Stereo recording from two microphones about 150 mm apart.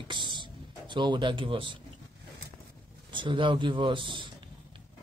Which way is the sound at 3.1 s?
35° right (ahead or behind).